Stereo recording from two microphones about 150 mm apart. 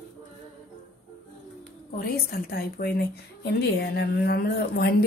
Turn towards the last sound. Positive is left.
turn(degrees=90)